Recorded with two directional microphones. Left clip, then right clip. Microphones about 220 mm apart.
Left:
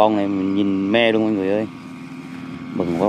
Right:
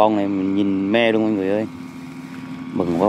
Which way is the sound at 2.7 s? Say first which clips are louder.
Right 1 dB; 10° right (ahead or behind).